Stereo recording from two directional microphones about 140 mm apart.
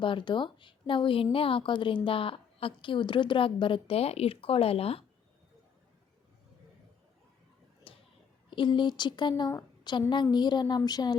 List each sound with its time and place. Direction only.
0.0 s a woman's voice: 35° left (ahead or behind)
7.9 s a sound: 40° left (ahead or behind)
8.4 s a woman's voice: 35° left (ahead or behind)